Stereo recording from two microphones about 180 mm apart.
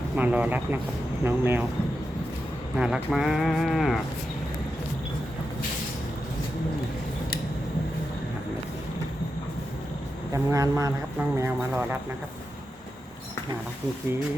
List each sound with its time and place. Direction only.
0.2 s speech: 10° right (ahead or behind)
2.7 s speech: 5° right (ahead or behind)
10.3 s speech: 20° right (ahead or behind)